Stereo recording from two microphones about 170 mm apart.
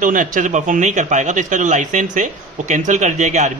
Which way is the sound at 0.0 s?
50° right (ahead or behind).